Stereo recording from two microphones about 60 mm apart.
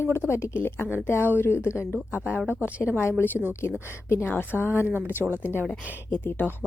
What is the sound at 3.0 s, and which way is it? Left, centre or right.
A woman's voice, left.